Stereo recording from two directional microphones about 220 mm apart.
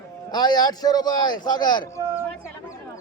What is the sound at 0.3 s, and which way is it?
A man's voice, 20° left (ahead or behind).